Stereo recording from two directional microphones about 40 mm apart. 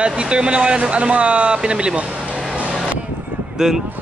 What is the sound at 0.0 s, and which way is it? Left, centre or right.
Speech, right.